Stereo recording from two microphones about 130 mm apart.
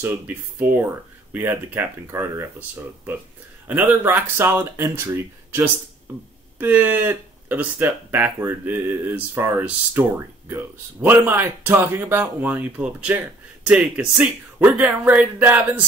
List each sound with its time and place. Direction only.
0.0 s speech: 15° right (ahead or behind)
3.6 s speech: 15° right (ahead or behind)